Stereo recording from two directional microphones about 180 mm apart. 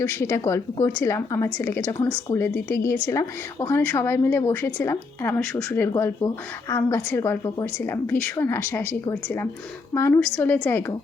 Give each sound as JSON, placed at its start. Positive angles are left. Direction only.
{"t": 0.0, "sound": "a woman's voice", "side_deg": 15}